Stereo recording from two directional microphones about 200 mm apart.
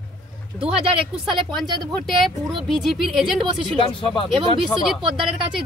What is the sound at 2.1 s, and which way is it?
Speech, centre (ahead or behind).